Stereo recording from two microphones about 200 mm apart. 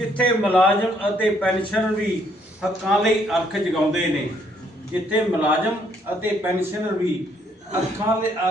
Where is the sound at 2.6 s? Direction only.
Centre (ahead or behind).